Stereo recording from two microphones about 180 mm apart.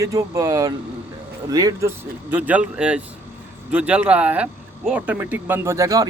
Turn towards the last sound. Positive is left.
turn(degrees=-20)  # may be behind; listen again after turning